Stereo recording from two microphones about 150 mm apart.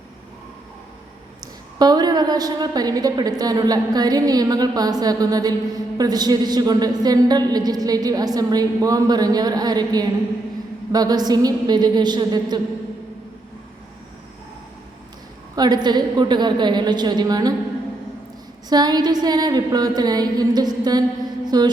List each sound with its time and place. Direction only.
1.8 s a woman's voice: 30° right (ahead or behind)
15.5 s a woman's voice: 25° right (ahead or behind)
18.7 s a woman's voice: 25° right (ahead or behind)